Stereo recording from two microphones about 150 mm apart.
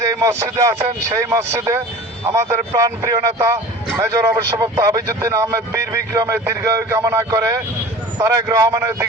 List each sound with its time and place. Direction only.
0.2 s a man's voice: 20° right (ahead or behind)